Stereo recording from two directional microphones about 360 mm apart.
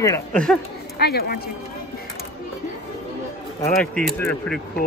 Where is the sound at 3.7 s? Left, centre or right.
Centre.